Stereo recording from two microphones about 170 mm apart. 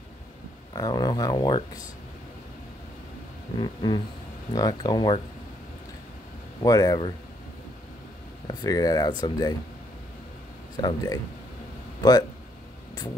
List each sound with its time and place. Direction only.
0.7 s speech: 25° left (ahead or behind)
3.5 s speech: 25° left (ahead or behind)
6.6 s speech: 20° left (ahead or behind)
8.5 s speech: 20° left (ahead or behind)
10.8 s speech: 25° left (ahead or behind)